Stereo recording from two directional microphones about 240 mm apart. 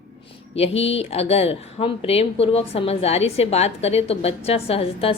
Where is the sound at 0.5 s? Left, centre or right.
Left.